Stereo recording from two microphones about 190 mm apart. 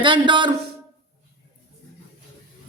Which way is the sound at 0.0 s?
25° right (ahead or behind).